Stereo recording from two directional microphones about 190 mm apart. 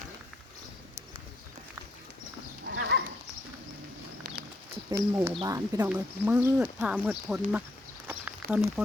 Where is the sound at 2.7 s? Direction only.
75° right (ahead or behind).